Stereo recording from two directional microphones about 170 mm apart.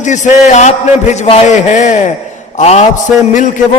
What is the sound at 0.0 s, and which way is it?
A man's voice, 45° left (ahead or behind).